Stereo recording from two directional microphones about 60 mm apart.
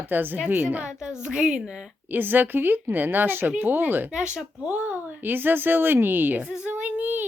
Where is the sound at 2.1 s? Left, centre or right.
Right.